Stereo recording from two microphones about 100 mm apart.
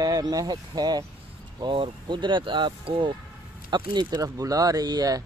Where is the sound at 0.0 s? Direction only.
40° right (ahead or behind); by 3.2 s 65° right (ahead or behind).